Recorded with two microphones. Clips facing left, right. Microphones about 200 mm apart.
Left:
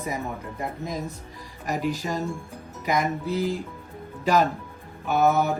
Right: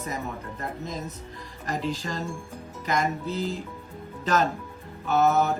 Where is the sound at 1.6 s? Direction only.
15° left (ahead or behind).